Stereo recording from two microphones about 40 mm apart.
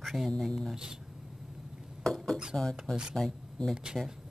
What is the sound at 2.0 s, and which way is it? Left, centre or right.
Dishes, centre.